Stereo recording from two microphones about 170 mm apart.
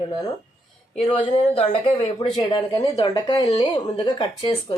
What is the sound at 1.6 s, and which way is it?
Speech, 35° left (ahead or behind).